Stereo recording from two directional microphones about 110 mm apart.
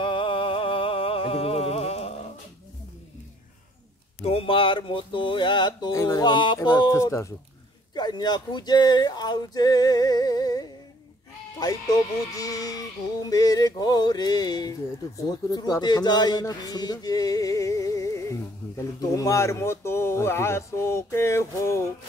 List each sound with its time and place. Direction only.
0.0 s music: 50° left (ahead or behind); by 2.1 s 70° left (ahead or behind)
4.2 s speech: 60° left (ahead or behind); by 6.9 s 40° left (ahead or behind)
6.9 s speech: 30° left (ahead or behind)
7.9 s speech: 40° left (ahead or behind)
12.3 s a sound: 35° left (ahead or behind)
15.1 s speech: 35° left (ahead or behind)